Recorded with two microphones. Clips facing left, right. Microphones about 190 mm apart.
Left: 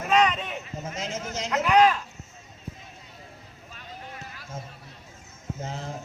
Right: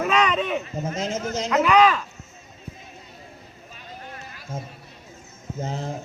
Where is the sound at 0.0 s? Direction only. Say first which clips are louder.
Right 1 dB; 90° right.